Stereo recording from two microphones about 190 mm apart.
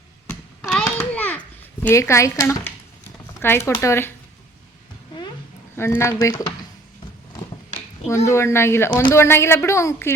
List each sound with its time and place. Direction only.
0.3 s a sound: 5° left (ahead or behind)
1.8 s speech: 15° left (ahead or behind)
5.7 s speech: 10° left (ahead or behind)
8.1 s speech: 15° left (ahead or behind)